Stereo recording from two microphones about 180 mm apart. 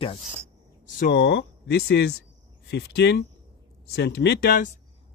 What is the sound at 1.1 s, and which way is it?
Speech, 70° left (ahead or behind).